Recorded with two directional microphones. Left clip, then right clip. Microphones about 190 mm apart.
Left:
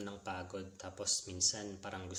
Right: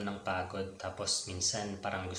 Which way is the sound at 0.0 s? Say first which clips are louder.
Right 8 dB; 45° left (ahead or behind).